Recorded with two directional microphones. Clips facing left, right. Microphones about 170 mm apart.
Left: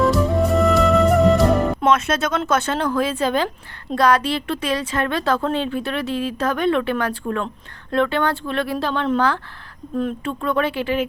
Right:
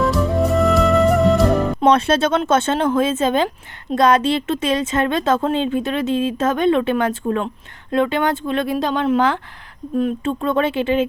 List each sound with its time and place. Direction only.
0.0 s music: centre (ahead or behind)
1.8 s speech: 30° right (ahead or behind)